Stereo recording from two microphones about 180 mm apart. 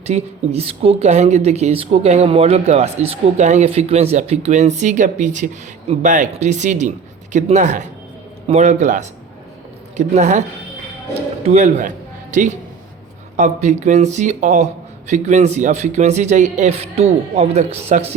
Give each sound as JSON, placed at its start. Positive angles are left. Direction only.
{"t": 0.1, "sound": "speech", "side_deg": -35}
{"t": 11.4, "sound": "a man's voice", "side_deg": -40}